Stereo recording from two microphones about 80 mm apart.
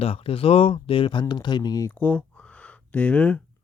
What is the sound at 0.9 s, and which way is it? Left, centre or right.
Speech, left.